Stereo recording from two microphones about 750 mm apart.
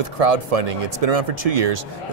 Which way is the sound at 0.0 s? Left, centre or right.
Right.